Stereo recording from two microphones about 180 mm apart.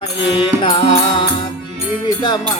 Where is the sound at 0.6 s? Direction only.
25° left (ahead or behind).